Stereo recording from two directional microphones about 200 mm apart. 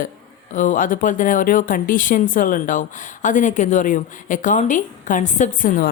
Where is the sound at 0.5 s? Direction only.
40° left (ahead or behind).